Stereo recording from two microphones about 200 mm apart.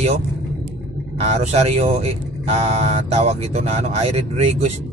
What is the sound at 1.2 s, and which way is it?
Speech, 30° right (ahead or behind).